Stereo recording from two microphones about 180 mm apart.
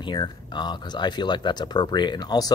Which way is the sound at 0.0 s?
25° left (ahead or behind).